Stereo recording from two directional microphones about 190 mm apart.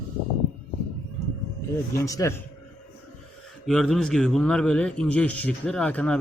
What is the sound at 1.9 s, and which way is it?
Speech, 15° left (ahead or behind).